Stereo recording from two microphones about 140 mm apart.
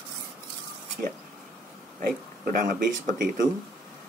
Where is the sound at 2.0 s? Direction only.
90° right.